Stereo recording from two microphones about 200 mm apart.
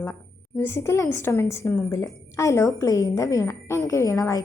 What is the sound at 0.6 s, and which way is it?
A woman's voice, 10° left (ahead or behind).